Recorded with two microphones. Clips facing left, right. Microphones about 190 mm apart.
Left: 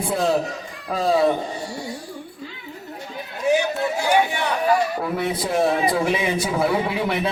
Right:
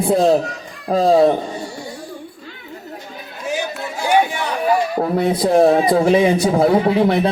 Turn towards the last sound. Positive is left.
turn(degrees=-40)  # may be behind; listen again after turning